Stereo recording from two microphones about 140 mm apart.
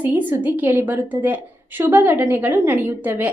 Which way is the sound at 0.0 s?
15° right (ahead or behind).